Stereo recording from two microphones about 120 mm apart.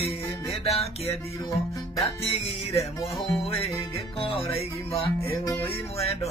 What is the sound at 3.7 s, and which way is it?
Music, 55° left (ahead or behind).